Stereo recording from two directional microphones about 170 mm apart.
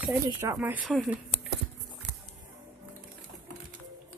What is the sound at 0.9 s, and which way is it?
Speech, centre (ahead or behind).